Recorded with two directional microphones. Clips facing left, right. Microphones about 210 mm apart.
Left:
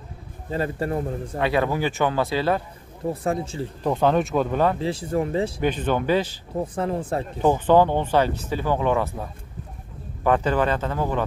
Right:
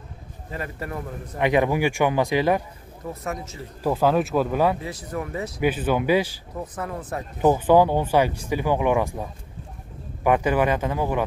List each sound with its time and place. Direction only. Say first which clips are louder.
0.5 s a man's voice: left 7 dB; 30° left (ahead or behind)
1.4 s speech: right 2 dB; 15° right (ahead or behind)
3.1 s a man's voice: left 6 dB; 30° left (ahead or behind)
3.8 s speech: even; 5° right (ahead or behind)
4.7 s a man's voice: left 6 dB; 30° left (ahead or behind)
5.6 s speech: right 1 dB; 10° right (ahead or behind)
6.5 s a man's voice: left 8 dB; 30° left (ahead or behind)
7.4 s speech: right 1 dB; 10° right (ahead or behind)